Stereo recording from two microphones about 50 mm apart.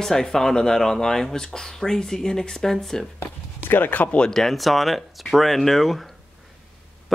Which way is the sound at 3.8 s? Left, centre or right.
Left.